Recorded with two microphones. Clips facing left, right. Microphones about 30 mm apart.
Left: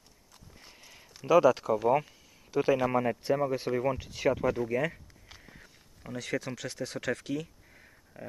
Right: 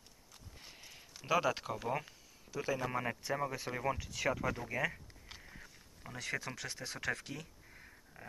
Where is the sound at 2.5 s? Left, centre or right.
Left.